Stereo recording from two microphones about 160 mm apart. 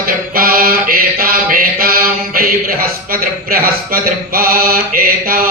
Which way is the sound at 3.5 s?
65° right (ahead or behind).